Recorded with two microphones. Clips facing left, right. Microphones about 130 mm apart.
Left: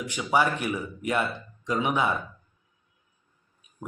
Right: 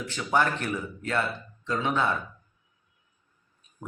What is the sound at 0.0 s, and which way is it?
Speech, 15° left (ahead or behind).